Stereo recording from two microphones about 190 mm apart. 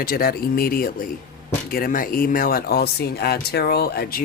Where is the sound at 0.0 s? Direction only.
50° left (ahead or behind).